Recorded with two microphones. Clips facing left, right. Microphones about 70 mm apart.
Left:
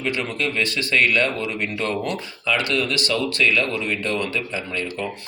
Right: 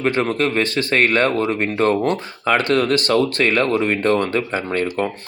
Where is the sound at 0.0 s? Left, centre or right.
Right.